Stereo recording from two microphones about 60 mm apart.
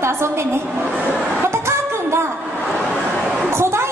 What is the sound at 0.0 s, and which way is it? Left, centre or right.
Speech, right.